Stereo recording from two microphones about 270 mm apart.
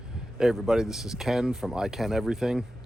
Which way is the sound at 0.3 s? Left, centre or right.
Centre.